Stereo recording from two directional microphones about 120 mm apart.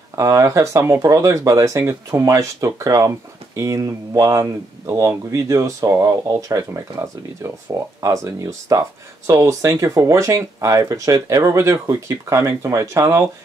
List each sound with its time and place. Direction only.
0.1 s speech: 30° right (ahead or behind)